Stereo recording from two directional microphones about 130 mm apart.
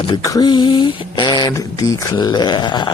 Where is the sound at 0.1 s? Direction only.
30° left (ahead or behind).